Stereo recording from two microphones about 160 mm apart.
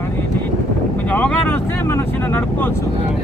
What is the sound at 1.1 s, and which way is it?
Vehicle, 10° left (ahead or behind).